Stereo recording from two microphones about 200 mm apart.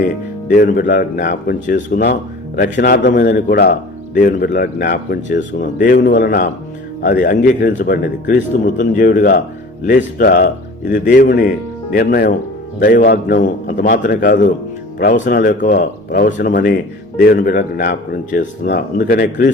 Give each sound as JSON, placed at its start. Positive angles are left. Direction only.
{"t": 0.0, "sound": "a man's voice", "side_deg": 40}
{"t": 7.0, "sound": "speech", "side_deg": 55}
{"t": 13.7, "sound": "a man's voice", "side_deg": 40}